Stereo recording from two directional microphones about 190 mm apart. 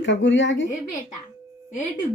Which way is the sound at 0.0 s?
75° left (ahead or behind).